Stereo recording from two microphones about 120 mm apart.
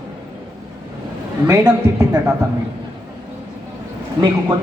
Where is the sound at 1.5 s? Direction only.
30° right (ahead or behind).